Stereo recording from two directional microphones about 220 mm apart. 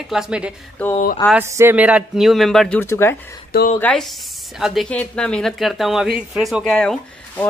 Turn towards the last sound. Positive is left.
turn(degrees=5)  # may be behind; listen again after turning